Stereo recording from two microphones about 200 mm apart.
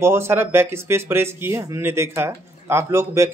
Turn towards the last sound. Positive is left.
turn(degrees=-15)  # may be behind; listen again after turning